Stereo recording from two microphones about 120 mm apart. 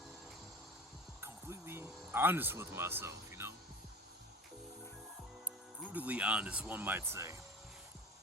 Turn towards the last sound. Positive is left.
turn(degrees=-25)  # may be behind; listen again after turning